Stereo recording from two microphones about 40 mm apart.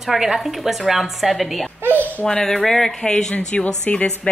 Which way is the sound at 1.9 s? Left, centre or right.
Left.